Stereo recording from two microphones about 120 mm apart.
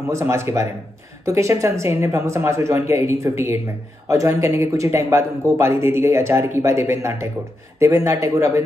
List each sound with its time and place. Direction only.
0.0 s speech: 25° right (ahead or behind)